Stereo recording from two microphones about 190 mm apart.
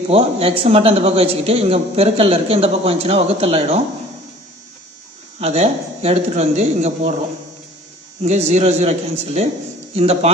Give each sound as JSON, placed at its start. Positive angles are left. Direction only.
{"t": 0.1, "sound": "a man's voice", "side_deg": -30}
{"t": 5.4, "sound": "a man's voice", "side_deg": -35}
{"t": 8.2, "sound": "a man's voice", "side_deg": -35}